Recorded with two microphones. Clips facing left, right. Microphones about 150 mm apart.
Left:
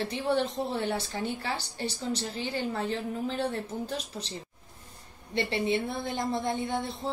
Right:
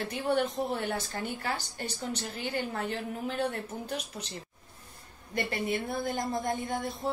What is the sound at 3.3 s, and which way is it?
Speech, 30° left (ahead or behind).